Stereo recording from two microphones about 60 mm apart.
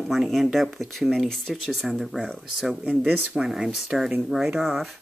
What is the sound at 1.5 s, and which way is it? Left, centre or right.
Speech, centre.